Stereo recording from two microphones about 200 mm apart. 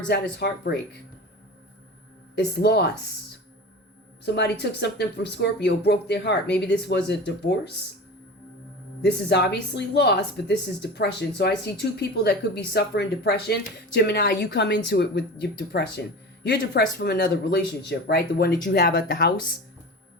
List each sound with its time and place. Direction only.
0.3 s speech: 55° left (ahead or behind)
2.6 s speech: 55° left (ahead or behind)
4.4 s speech: 55° left (ahead or behind)
9.0 s speech: 55° left (ahead or behind)